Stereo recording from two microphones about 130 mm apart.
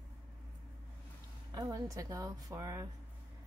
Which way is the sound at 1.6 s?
25° right (ahead or behind).